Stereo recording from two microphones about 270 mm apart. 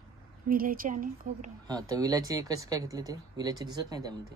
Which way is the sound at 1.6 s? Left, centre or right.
Centre.